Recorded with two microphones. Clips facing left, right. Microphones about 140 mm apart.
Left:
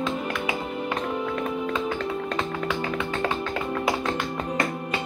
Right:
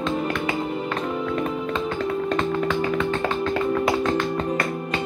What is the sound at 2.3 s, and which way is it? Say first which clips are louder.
Music: right 5 dB; 5° left (ahead or behind).